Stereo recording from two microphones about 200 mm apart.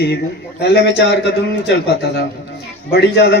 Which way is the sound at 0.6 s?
60° left (ahead or behind).